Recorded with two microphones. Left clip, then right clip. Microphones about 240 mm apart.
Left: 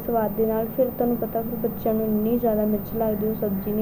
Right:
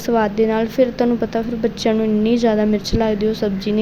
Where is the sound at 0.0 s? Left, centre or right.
Right.